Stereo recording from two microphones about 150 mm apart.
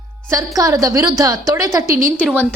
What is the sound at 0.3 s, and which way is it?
A woman's voice, 25° right (ahead or behind).